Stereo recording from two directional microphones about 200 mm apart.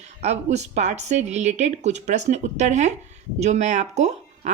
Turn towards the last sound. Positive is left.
turn(degrees=-35)  # may be behind; listen again after turning